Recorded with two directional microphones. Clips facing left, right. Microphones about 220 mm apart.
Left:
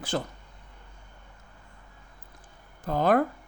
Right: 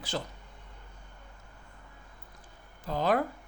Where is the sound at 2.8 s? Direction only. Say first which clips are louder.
Left 5 dB; 55° left (ahead or behind).